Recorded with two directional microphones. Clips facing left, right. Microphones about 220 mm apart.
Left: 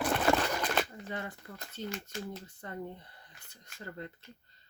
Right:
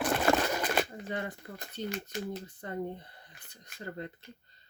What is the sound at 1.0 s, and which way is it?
Speech, 20° right (ahead or behind).